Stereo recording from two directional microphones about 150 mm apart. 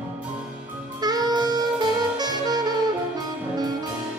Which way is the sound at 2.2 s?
25° right (ahead or behind).